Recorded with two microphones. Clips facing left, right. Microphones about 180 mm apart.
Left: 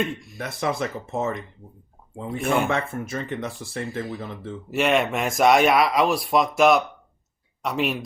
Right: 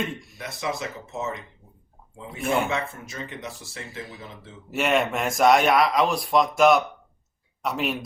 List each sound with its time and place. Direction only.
0.3 s speech: 55° left (ahead or behind)
4.7 s speech: centre (ahead or behind)